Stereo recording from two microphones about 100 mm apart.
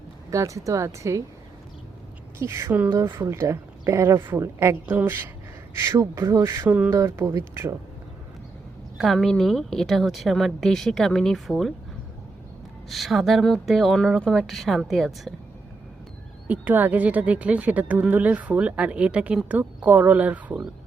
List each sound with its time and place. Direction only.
0.3 s speech: 30° right (ahead or behind)
2.4 s a woman's voice: 25° right (ahead or behind)
9.0 s a woman's voice: centre (ahead or behind)
12.9 s a woman's voice: centre (ahead or behind)
16.5 s a woman's voice: 15° right (ahead or behind)